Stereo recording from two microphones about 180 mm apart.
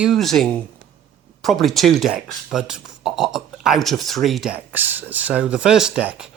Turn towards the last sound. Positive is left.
turn(degrees=-5)  # may be behind; listen again after turning